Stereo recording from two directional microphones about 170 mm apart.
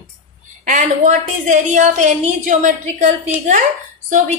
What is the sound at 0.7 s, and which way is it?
A woman's voice, 45° right (ahead or behind).